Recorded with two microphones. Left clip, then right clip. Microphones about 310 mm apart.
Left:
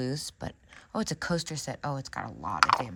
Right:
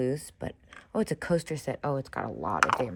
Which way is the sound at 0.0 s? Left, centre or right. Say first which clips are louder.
Right 4 dB; centre.